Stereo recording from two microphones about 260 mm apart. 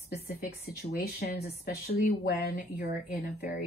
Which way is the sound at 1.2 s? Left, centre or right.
Left.